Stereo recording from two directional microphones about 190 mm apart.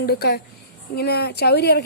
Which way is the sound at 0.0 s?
55° left (ahead or behind).